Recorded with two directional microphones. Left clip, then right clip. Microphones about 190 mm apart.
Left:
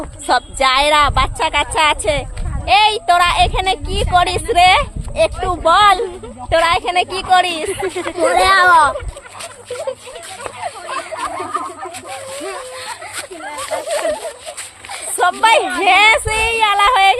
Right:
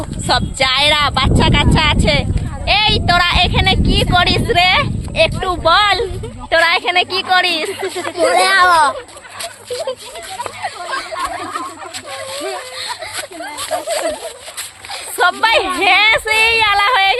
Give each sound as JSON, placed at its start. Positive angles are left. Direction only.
{"t": 0.3, "sound": "a woman's voice", "side_deg": 0}
{"t": 8.1, "sound": "a child's voice", "side_deg": -10}
{"t": 15.2, "sound": "a woman's voice", "side_deg": 0}